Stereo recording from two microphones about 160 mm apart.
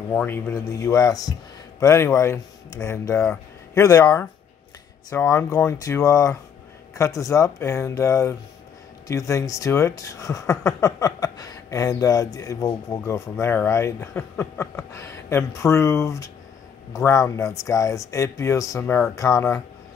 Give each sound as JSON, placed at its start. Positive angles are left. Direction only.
{"t": 0.1, "sound": "speech", "side_deg": 10}
{"t": 5.1, "sound": "speech", "side_deg": 15}